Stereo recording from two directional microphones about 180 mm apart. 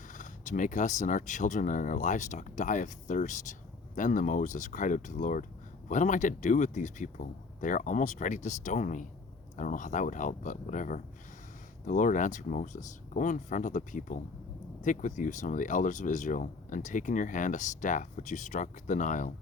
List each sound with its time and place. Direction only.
0.1 s speech: 45° left (ahead or behind)